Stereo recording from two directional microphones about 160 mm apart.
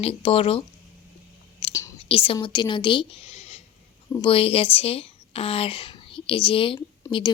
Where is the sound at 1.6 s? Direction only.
35° left (ahead or behind).